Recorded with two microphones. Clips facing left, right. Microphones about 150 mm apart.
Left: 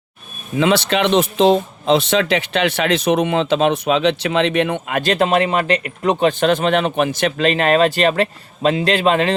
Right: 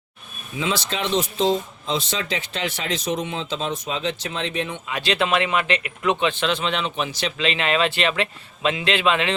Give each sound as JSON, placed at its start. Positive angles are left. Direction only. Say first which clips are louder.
{"t": 0.5, "sound": "speech", "louder": "left 10 dB", "side_deg": 65}